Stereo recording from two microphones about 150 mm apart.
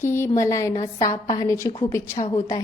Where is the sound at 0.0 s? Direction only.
15° left (ahead or behind).